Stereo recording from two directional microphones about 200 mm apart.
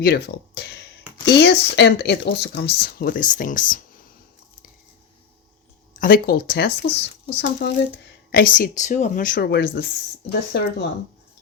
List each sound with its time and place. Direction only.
0.0 s speech: 55° left (ahead or behind)
6.0 s speech: 45° left (ahead or behind)
8.3 s speech: 45° left (ahead or behind)
9.3 s speech: 60° left (ahead or behind)